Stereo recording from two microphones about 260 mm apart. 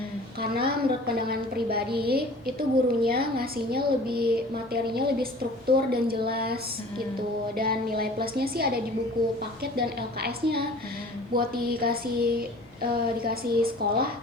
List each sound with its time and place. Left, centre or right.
0.5 s a woman's voice: right